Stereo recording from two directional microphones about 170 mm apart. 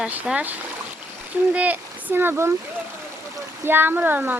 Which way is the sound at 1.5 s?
10° right (ahead or behind).